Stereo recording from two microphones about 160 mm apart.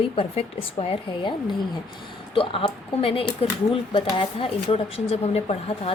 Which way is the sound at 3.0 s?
35° left (ahead or behind).